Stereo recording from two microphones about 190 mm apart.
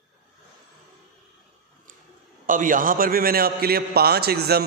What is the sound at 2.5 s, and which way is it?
A man's voice, 45° right (ahead or behind).